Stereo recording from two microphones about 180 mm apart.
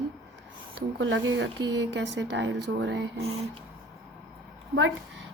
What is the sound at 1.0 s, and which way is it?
Speech, 90° right.